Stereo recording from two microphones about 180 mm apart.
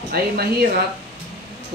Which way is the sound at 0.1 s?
60° right (ahead or behind).